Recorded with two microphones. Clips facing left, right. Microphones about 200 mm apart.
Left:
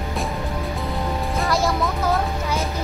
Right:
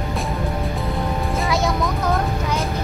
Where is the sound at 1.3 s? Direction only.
Centre (ahead or behind).